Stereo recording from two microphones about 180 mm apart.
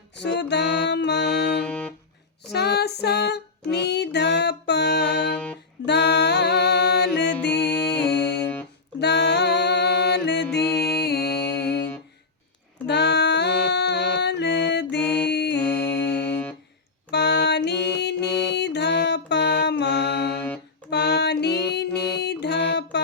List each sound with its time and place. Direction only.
0.2 s music: 75° left (ahead or behind)
1.5 s music: 5° left (ahead or behind)
2.5 s female singing: 65° left (ahead or behind)
3.7 s music: 70° left (ahead or behind)
7.6 s music: 5° left (ahead or behind)
9.0 s music: 70° left (ahead or behind)
10.6 s music: 5° left (ahead or behind)
10.9 s music: 65° left (ahead or behind)
12.9 s music: 70° left (ahead or behind)
15.0 s music: 5° left (ahead or behind)
15.3 s music: 70° left (ahead or behind)
15.7 s music: 10° left (ahead or behind)
17.1 s music: 70° left (ahead or behind)